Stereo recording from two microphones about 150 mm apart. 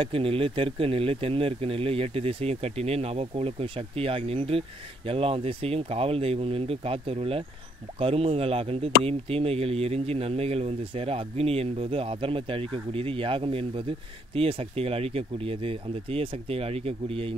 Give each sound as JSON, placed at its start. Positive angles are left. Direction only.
{"t": 0.0, "sound": "speech", "side_deg": -40}